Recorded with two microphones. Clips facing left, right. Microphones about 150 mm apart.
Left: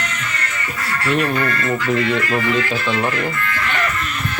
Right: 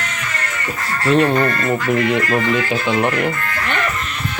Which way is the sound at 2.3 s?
25° right (ahead or behind).